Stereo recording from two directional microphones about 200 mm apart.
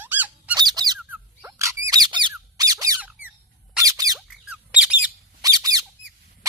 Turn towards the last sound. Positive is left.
turn(degrees=-20)  # may be behind; listen again after turning